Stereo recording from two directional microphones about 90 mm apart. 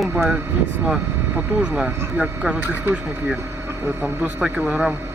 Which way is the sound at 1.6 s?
10° right (ahead or behind).